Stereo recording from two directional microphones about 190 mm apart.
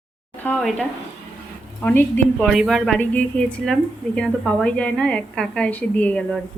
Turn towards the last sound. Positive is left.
turn(degrees=5)  # may be behind; listen again after turning